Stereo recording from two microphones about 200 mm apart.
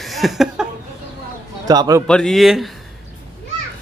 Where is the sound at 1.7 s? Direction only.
20° right (ahead or behind).